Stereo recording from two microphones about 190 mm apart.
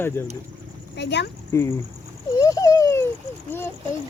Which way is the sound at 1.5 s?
15° left (ahead or behind).